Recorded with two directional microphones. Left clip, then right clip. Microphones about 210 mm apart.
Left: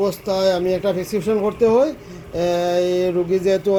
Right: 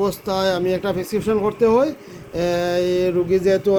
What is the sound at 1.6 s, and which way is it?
Speech, 5° right (ahead or behind).